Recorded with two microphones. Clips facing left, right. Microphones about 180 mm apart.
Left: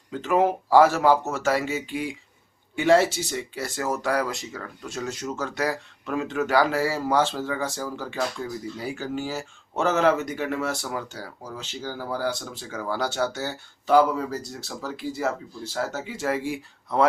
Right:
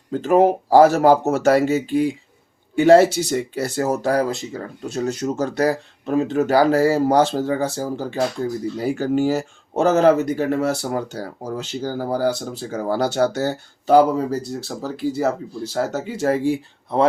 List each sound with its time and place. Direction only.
0.1 s speech: 40° right (ahead or behind)
8.8 s speech: 50° right (ahead or behind); by 17.1 s 30° right (ahead or behind)